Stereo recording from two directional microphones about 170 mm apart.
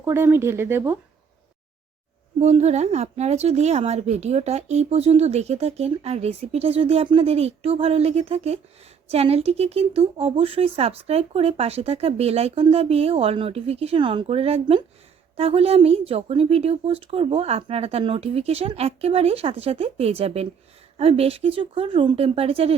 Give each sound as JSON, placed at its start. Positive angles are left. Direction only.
{"t": 0.0, "sound": "speech", "side_deg": -15}
{"t": 2.4, "sound": "speech", "side_deg": -40}